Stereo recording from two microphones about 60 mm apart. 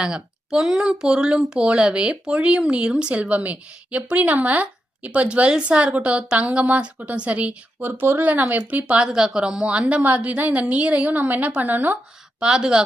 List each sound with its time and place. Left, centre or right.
0.0 s speech: centre
7.8 s speech: right
9.0 s a woman's voice: centre
10.0 s speech: right
12.4 s a woman's voice: centre